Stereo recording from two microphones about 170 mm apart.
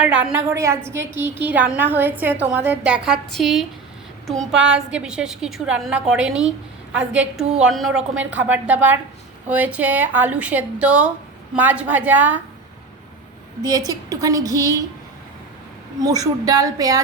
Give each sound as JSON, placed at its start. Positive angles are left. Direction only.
{"t": 0.0, "sound": "a woman's voice", "side_deg": -5}
{"t": 4.5, "sound": "a woman's voice", "side_deg": -90}
{"t": 4.9, "sound": "a woman's voice", "side_deg": -5}
{"t": 13.7, "sound": "a woman's voice", "side_deg": -20}
{"t": 16.0, "sound": "a woman's voice", "side_deg": -20}